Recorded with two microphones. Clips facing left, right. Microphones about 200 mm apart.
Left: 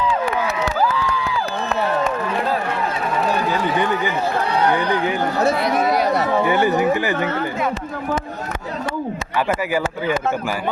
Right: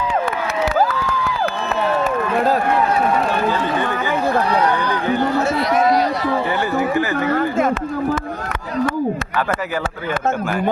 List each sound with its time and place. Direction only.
0.8 s crowd: 45° right (ahead or behind)
6.5 s speech: 15° left (ahead or behind)